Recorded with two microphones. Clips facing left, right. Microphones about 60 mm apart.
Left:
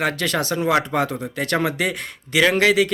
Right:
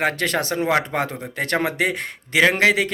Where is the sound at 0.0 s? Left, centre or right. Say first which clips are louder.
Even; right.